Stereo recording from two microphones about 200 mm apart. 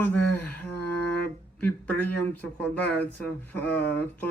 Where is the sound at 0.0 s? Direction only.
10° left (ahead or behind).